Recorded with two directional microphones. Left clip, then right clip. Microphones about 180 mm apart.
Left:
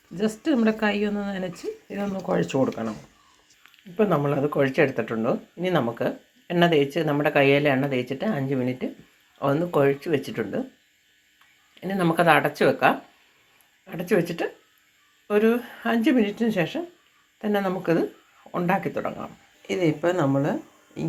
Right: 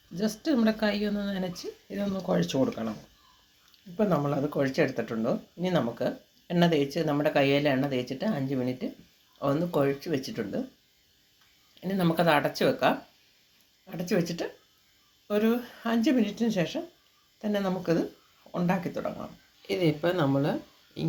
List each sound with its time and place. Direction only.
0.2 s speech: 10° left (ahead or behind)
3.9 s speech: 10° left (ahead or behind)
11.7 s speech: 5° left (ahead or behind)